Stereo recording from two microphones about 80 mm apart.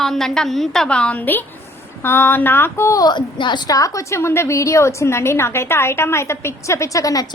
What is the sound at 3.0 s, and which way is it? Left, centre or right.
Speech, left.